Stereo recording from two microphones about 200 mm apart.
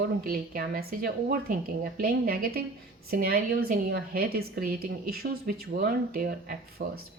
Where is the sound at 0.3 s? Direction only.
50° right (ahead or behind).